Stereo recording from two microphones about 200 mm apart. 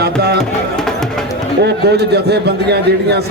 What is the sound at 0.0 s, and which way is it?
Music, 55° right (ahead or behind).